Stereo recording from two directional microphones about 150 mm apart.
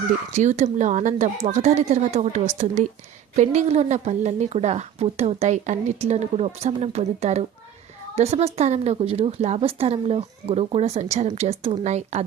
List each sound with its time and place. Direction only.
0.3 s a woman's voice: 55° right (ahead or behind)